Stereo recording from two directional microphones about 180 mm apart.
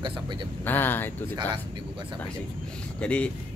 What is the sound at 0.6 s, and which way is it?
Speech, 10° left (ahead or behind).